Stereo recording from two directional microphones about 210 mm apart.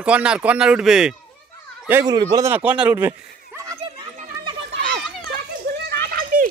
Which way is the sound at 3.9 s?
20° right (ahead or behind).